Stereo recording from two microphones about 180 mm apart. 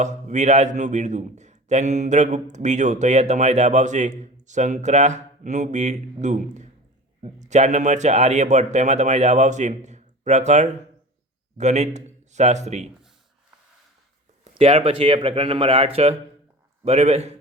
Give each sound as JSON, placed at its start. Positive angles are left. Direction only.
{"t": 0.0, "sound": "a man's voice", "side_deg": -40}
{"t": 14.6, "sound": "a man's voice", "side_deg": -35}